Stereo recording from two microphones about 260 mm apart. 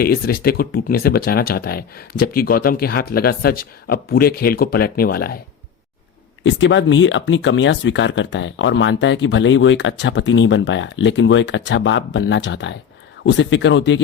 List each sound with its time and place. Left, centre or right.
0.0 s speech: left
6.4 s speech: left